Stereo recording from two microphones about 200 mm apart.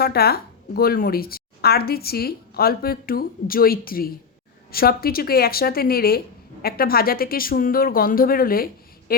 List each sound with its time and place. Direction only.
0.0 s speech: 50° left (ahead or behind)